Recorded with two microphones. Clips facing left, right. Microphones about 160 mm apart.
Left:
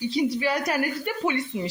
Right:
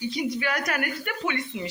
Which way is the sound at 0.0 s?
30° left (ahead or behind).